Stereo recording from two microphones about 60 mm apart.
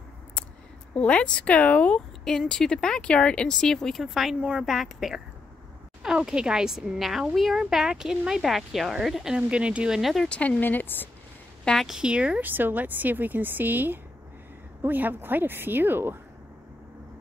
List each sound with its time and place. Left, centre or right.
0.9 s speech: centre
4.4 s speech: centre
9.5 s speech: centre
10.2 s speech: centre
10.6 s speech: left
11.7 s speech: centre
12.0 s speech: centre
12.4 s speech: right